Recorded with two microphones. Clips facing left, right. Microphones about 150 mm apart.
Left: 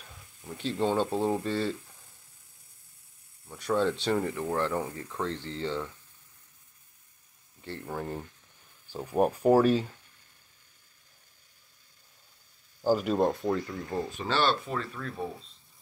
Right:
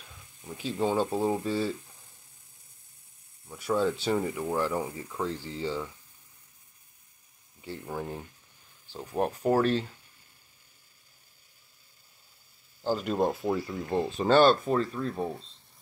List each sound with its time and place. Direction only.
0.6 s speech: 5° right (ahead or behind)
3.4 s speech: 5° right (ahead or behind)
7.6 s speech: 5° right (ahead or behind)
8.8 s speech: 10° left (ahead or behind)
12.8 s speech: 10° left (ahead or behind)
13.1 s speech: 5° right (ahead or behind)
13.7 s speech: 20° right (ahead or behind)
14.2 s speech: 45° right (ahead or behind)
15.0 s speech: 30° right (ahead or behind)